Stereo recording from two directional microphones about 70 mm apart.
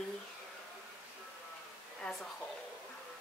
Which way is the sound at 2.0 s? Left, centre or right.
Centre.